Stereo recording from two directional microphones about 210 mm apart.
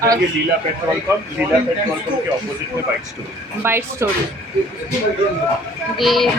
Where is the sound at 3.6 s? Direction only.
10° right (ahead or behind).